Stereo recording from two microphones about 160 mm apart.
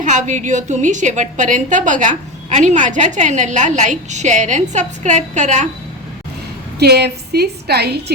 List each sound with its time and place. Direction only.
0.0 s a woman's voice: 50° right (ahead or behind)
6.7 s a woman's voice: 90° right